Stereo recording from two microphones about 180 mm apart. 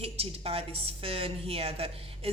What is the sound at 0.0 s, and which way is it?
A woman's voice, 35° right (ahead or behind).